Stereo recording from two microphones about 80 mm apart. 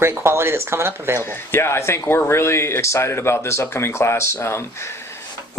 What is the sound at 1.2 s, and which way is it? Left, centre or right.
Speech, left.